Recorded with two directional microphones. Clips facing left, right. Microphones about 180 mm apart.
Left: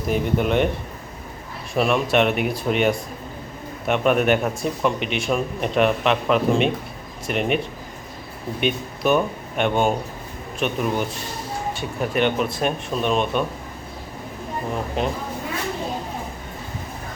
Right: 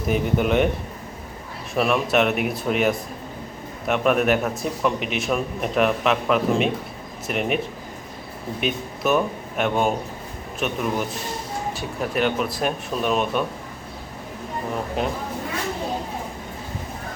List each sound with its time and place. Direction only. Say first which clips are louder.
0.1 s a man's voice: even; centre (ahead or behind)
1.7 s a man's voice: left 1 dB; centre (ahead or behind)